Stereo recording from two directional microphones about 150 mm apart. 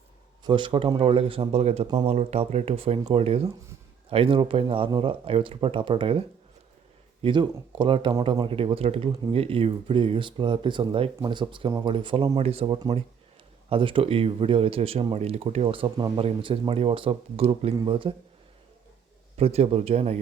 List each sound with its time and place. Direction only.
0.4 s speech: 30° right (ahead or behind)
19.4 s a man's voice: 40° right (ahead or behind)